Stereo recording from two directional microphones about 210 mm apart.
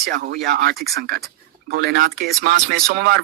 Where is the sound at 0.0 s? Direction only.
45° right (ahead or behind).